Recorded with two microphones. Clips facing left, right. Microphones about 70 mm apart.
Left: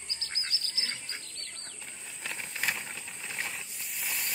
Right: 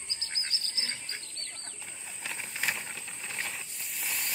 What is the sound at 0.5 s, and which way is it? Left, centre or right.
Bird, right.